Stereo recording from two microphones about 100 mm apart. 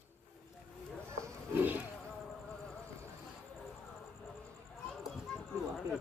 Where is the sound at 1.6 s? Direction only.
20° right (ahead or behind).